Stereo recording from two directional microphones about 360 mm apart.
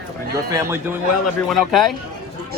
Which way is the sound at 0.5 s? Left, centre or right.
Centre.